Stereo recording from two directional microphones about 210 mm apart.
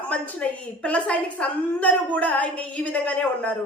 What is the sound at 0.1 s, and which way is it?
A woman's voice, 5° left (ahead or behind).